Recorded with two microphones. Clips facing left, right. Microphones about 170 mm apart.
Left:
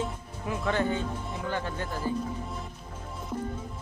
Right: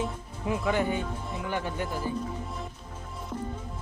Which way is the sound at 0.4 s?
15° right (ahead or behind).